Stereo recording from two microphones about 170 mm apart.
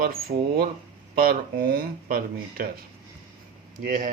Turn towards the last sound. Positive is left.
turn(degrees=-55)  # may be behind; listen again after turning